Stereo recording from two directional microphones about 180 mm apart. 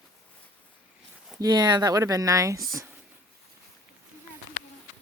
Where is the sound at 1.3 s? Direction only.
20° right (ahead or behind).